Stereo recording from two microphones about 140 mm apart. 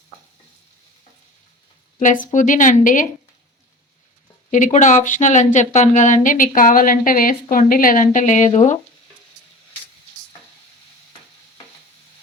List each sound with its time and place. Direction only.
2.2 s a woman's voice: 65° left (ahead or behind)
4.5 s a woman's voice: 60° left (ahead or behind); by 7.3 s 90° left
7.5 s a woman's voice: 80° left; by 8.8 s 55° left (ahead or behind)